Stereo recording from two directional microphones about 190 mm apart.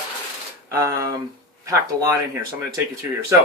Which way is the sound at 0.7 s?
15° right (ahead or behind).